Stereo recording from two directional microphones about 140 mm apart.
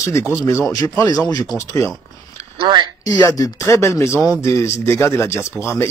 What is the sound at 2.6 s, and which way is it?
Speech, 30° right (ahead or behind).